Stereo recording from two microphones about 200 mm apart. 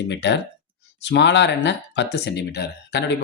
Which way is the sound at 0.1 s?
60° left (ahead or behind).